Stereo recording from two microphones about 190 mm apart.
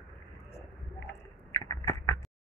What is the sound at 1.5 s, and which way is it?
Typing, 15° left (ahead or behind).